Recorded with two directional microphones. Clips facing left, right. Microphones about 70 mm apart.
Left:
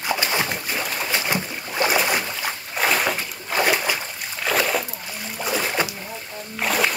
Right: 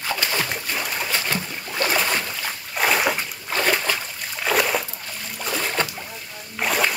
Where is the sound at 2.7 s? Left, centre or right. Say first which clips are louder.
Right 1 dB; centre.